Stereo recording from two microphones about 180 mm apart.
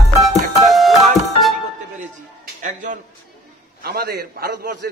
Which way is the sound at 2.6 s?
45° right (ahead or behind).